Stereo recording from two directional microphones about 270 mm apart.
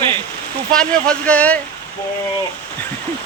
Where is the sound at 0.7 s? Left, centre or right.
Centre.